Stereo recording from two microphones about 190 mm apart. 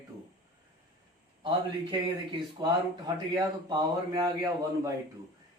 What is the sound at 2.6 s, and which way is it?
Speech, 20° right (ahead or behind).